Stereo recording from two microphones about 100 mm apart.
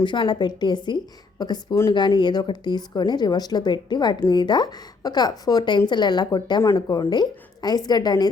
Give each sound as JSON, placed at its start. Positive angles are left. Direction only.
{"t": 0.0, "sound": "a woman's voice", "side_deg": 55}